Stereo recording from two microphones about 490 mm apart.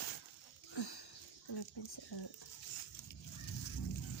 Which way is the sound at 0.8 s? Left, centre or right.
Left.